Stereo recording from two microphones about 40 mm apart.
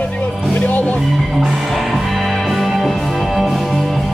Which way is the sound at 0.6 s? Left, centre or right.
Left.